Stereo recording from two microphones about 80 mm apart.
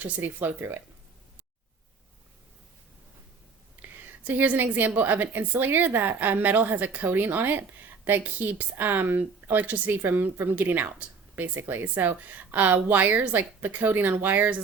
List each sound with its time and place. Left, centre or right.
0.0 s a woman's voice: right
3.8 s a sound: right
4.9 s a woman's voice: right